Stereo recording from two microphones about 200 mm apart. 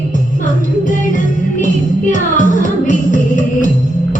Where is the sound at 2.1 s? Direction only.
40° left (ahead or behind).